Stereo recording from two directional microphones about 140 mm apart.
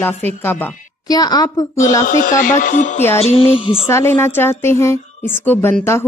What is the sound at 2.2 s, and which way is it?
Speech, 65° left (ahead or behind).